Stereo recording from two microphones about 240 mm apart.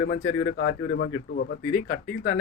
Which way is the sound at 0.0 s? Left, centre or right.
Left.